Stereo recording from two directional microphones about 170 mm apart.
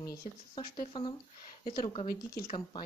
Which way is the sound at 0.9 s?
25° left (ahead or behind).